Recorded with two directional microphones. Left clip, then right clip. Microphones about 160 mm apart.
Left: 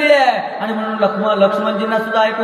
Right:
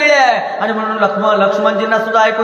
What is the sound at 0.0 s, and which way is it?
A man's voice, 10° right (ahead or behind).